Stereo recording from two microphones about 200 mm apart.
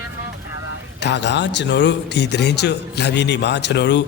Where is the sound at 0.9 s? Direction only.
60° left (ahead or behind).